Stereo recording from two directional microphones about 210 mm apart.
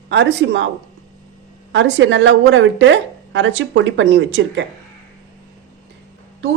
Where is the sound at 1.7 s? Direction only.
60° right (ahead or behind).